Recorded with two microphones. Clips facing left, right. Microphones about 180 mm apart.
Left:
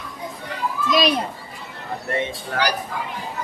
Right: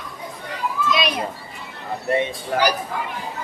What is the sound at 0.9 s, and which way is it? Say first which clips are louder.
Speech: left 4 dB; 40° left (ahead or behind).